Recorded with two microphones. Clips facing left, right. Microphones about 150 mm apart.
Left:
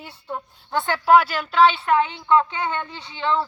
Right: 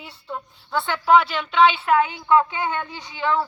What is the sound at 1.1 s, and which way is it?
Speech, 5° left (ahead or behind).